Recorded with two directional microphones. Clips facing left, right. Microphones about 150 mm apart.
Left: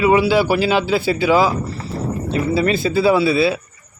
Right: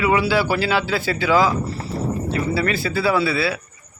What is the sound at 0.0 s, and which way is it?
Speech, 20° left (ahead or behind).